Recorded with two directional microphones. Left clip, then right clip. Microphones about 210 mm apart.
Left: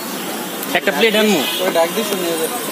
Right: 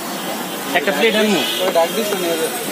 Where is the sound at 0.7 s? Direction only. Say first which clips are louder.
Left 1 dB; 45° left (ahead or behind).